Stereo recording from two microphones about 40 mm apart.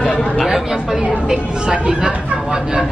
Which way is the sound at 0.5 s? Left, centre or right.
Centre.